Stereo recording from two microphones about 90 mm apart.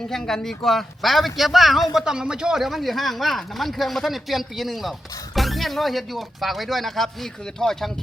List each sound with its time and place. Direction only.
0.1 s speech: 5° left (ahead or behind)